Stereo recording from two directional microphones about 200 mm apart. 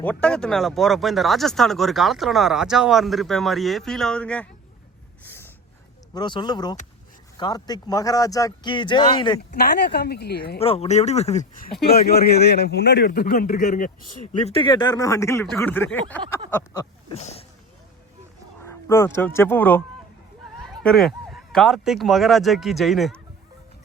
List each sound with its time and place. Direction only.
0.0 s speech: 5° left (ahead or behind)
5.2 s snort: 10° left (ahead or behind)
6.1 s speech: 20° left (ahead or behind)
9.4 s a man's voice: 55° left (ahead or behind)
10.6 s speech: 30° left (ahead or behind)
11.9 s a man's voice: 50° left (ahead or behind)
14.5 s speech: 25° left (ahead or behind); by 16.4 s 10° left (ahead or behind)
17.1 s speech: 30° left (ahead or behind)
18.6 s speech: 15° left (ahead or behind)
20.8 s speech: centre (ahead or behind)